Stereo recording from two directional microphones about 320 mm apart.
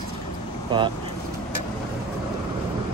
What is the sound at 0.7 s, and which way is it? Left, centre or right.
Speech, centre.